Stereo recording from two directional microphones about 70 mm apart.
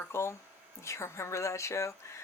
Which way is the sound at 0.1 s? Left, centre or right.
Left.